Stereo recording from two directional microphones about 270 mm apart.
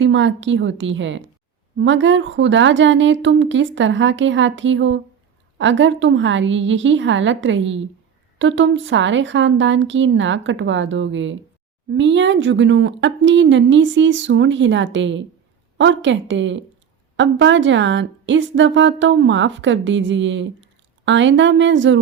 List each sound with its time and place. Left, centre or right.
0.0 s a woman's voice: right